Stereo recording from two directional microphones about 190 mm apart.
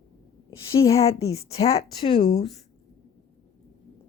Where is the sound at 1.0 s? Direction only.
30° left (ahead or behind).